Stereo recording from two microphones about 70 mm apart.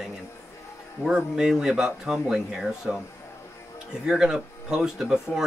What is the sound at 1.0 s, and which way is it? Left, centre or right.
Speech, centre.